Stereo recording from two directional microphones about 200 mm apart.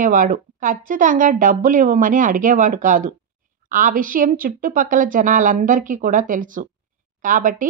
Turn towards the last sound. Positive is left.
turn(degrees=-40)  # may be behind; listen again after turning